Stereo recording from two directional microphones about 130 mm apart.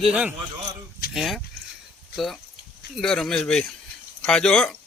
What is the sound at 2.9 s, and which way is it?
A man's voice, centre (ahead or behind).